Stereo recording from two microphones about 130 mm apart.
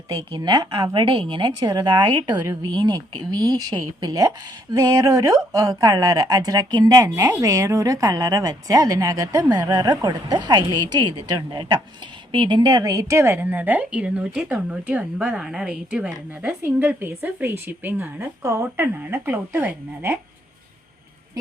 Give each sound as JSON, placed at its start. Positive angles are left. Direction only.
{"t": 0.1, "sound": "a woman's voice", "side_deg": -30}